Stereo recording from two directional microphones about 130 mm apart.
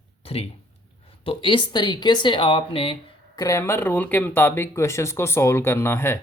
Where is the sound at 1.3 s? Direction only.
40° left (ahead or behind).